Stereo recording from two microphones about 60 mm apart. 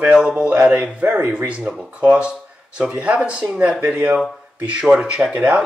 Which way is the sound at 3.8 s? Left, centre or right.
Right.